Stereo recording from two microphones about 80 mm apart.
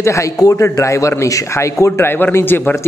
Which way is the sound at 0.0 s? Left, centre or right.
Left.